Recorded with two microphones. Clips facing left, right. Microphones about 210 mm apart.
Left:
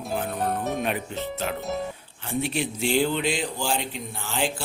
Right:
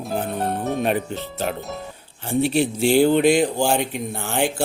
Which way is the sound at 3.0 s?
55° right (ahead or behind).